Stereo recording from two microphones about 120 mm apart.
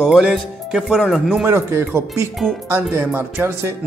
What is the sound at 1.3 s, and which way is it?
Speech, 20° right (ahead or behind).